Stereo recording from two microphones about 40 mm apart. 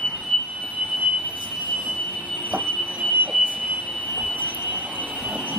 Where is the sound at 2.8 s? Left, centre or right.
Right.